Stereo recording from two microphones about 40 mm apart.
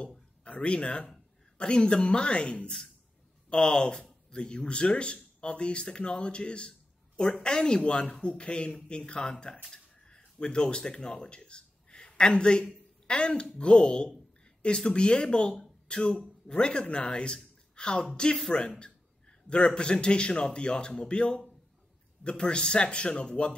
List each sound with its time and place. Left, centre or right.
0.4 s speech: left
9.7 s dishes: centre
10.5 s a man's voice: left